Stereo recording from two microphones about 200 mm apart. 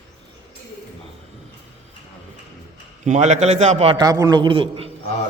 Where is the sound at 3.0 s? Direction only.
35° right (ahead or behind).